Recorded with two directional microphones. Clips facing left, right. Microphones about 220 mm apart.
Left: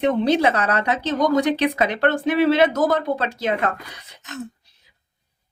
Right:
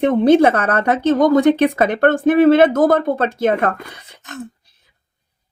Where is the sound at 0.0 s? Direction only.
50° right (ahead or behind).